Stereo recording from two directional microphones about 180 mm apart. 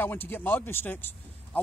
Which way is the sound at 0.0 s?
10° left (ahead or behind).